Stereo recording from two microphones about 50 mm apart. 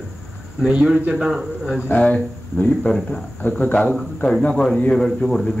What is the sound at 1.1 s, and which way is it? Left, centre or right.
Speech, centre.